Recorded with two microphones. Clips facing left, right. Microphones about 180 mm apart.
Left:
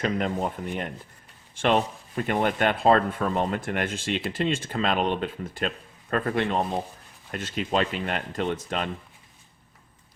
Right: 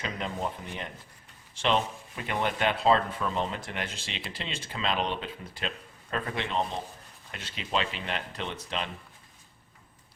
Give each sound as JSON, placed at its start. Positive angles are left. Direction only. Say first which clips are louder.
{"t": 0.0, "sound": "a man's voice", "louder": "left 7 dB", "side_deg": 50}